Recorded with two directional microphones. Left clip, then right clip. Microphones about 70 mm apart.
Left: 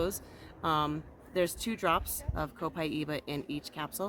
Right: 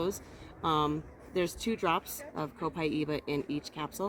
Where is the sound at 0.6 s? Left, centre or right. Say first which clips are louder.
Right 1 dB; left.